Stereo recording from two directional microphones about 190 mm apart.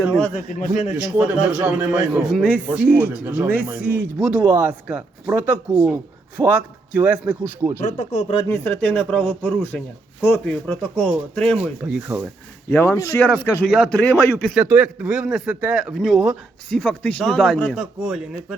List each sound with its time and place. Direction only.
0.3 s speech: 45° left (ahead or behind)
0.9 s a man's voice: 5° right (ahead or behind)
7.8 s speech: 40° left (ahead or behind)
8.4 s a man's voice: 10° left (ahead or behind); by 12.2 s 5° right (ahead or behind)
12.7 s a man's voice: 15° left (ahead or behind)